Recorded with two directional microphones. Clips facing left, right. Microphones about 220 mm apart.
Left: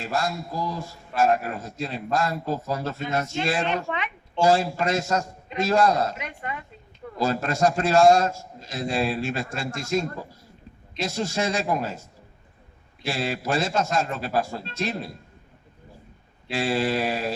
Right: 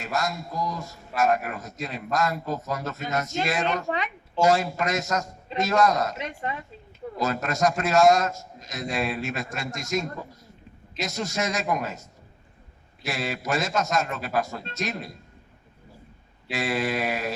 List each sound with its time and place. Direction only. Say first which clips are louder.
0.0 s a man's voice: left 1 dB; 30° left (ahead or behind)
3.8 s speech: right 2 dB; 35° right (ahead or behind)
4.4 s a man's voice: left 1 dB; 30° left (ahead or behind)
6.1 s speech: right 2 dB; 30° right (ahead or behind)
7.2 s a man's voice: left 2 dB; 30° left (ahead or behind)
16.5 s a man's voice: left 3 dB; 30° left (ahead or behind)